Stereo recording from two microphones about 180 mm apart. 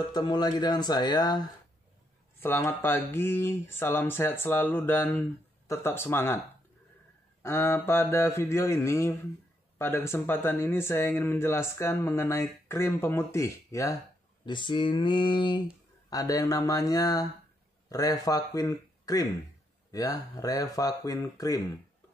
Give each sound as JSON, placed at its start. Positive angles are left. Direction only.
{"t": 0.1, "sound": "speech", "side_deg": 25}
{"t": 2.4, "sound": "speech", "side_deg": 15}
{"t": 7.4, "sound": "a man's voice", "side_deg": 15}